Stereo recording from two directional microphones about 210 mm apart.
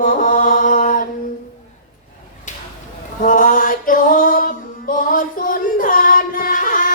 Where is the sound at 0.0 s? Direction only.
40° left (ahead or behind).